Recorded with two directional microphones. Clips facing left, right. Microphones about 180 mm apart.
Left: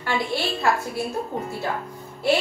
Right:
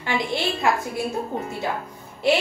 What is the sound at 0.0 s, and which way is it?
Speech, 20° right (ahead or behind).